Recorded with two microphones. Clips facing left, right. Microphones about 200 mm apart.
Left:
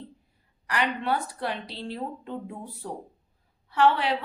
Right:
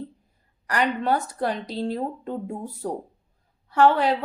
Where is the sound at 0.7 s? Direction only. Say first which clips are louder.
Right 4 dB; 45° right (ahead or behind).